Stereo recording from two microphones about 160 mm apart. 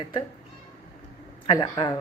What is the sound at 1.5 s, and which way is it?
Speech, 25° left (ahead or behind).